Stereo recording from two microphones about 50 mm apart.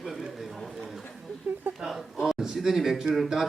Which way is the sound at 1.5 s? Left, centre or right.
Right.